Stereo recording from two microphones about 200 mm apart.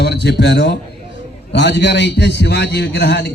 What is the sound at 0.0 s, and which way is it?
A man's voice, 55° left (ahead or behind).